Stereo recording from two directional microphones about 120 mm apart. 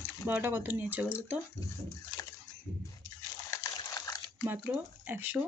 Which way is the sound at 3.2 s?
30° left (ahead or behind).